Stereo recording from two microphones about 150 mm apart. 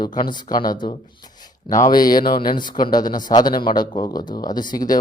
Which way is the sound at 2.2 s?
75° left (ahead or behind).